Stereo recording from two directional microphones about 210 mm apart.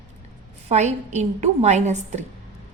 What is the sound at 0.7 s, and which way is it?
A woman's voice, 30° right (ahead or behind).